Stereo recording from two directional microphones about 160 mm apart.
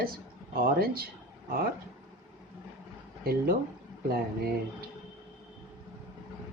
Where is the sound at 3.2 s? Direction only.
70° right (ahead or behind).